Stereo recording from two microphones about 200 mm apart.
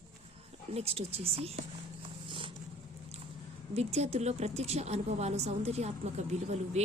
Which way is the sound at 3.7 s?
30° right (ahead or behind).